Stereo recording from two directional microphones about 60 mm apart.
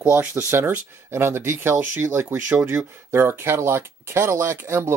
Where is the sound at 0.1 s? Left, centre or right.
Right.